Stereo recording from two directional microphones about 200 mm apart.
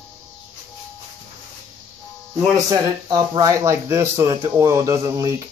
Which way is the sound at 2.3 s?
20° right (ahead or behind).